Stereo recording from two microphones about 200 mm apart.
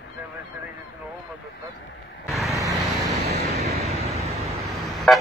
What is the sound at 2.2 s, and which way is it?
Vehicle, centre (ahead or behind).